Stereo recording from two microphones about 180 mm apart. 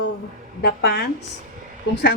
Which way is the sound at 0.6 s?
65° left (ahead or behind).